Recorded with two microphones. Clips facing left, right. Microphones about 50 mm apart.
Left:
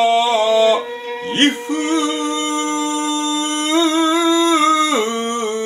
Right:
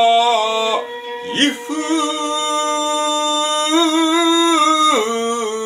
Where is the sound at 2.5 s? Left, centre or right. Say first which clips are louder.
Right 2 dB; right.